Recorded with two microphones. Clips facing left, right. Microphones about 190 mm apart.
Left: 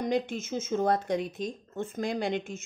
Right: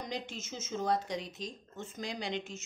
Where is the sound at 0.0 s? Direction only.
55° left (ahead or behind).